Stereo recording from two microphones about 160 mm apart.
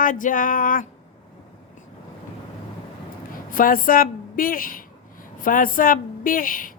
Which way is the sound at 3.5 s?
60° left (ahead or behind).